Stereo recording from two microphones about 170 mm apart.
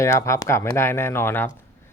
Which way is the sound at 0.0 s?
15° left (ahead or behind).